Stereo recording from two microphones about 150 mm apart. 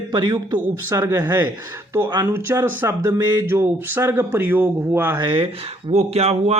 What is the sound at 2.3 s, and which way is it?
Speech, 15° right (ahead or behind).